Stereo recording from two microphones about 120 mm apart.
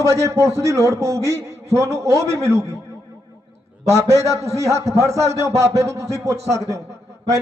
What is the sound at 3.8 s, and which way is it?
A man's voice, 25° right (ahead or behind).